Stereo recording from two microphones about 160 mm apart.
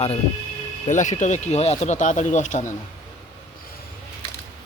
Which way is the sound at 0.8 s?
50° left (ahead or behind).